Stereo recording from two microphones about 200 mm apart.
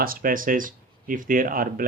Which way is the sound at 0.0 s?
45° right (ahead or behind).